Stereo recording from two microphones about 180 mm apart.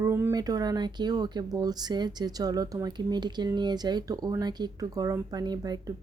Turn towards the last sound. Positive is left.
turn(degrees=-20)  # may be behind; listen again after turning